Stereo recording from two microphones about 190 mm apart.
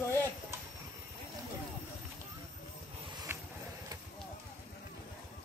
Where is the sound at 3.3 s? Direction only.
15° right (ahead or behind).